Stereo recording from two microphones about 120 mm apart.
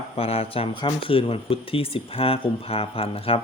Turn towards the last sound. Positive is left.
turn(degrees=50)  # may be behind; listen again after turning